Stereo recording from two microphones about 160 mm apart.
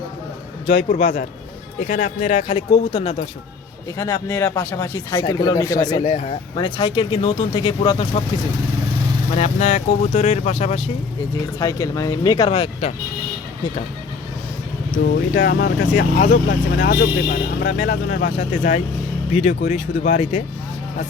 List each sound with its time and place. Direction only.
0.7 s speech: 60° left (ahead or behind); by 3.2 s 40° left (ahead or behind)
3.9 s speech: 20° left (ahead or behind)
6.0 s speech: 50° left (ahead or behind)
6.6 s speech: 30° left (ahead or behind)
9.3 s speech: 45° left (ahead or behind)
11.6 s speech: 20° left (ahead or behind)
12.5 s speech: 40° left (ahead or behind)
15.0 s speech: 70° left (ahead or behind); by 20.4 s 50° left (ahead or behind)